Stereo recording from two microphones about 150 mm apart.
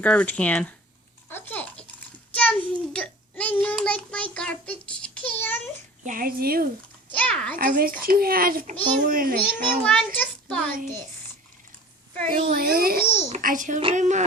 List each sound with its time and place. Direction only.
0.0 s speech: 10° left (ahead or behind)
1.3 s babbling: 15° left (ahead or behind)
2.3 s child singing: 10° left (ahead or behind)
6.1 s speech: 75° right (ahead or behind)
7.2 s speech: 5° left (ahead or behind)
7.6 s speech: 70° right (ahead or behind)
9.8 s a child's voice: 10° left (ahead or behind)
12.3 s a child's voice: 75° right (ahead or behind)
13.0 s speech: 15° left (ahead or behind)
13.3 s a child's voice: 60° right (ahead or behind)